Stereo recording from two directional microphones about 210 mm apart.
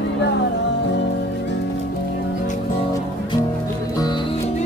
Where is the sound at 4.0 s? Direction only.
20° left (ahead or behind).